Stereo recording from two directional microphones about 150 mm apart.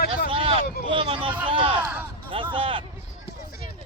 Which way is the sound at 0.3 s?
35° right (ahead or behind).